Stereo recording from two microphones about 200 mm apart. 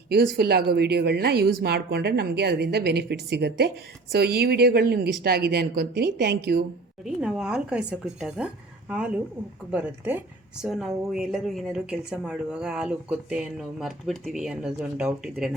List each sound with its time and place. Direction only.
0.1 s a woman's voice: 50° right (ahead or behind)
7.0 s a woman's voice: 5° right (ahead or behind)